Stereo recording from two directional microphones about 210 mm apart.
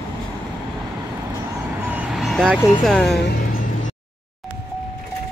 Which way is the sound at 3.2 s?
50° left (ahead or behind).